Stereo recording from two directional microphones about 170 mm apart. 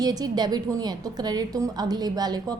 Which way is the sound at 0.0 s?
20° right (ahead or behind).